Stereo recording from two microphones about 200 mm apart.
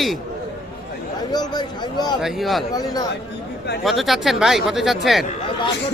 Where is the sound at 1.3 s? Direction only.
20° left (ahead or behind).